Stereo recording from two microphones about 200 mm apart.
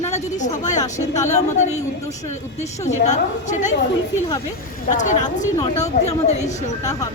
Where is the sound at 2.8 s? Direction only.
35° left (ahead or behind).